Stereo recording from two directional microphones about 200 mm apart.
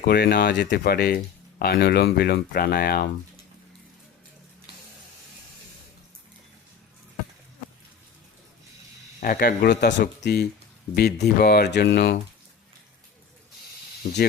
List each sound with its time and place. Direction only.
0.0 s speech: 50° left (ahead or behind)
9.2 s speech: 45° left (ahead or behind)